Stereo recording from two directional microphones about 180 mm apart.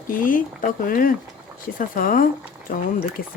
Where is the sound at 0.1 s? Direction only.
50° left (ahead or behind).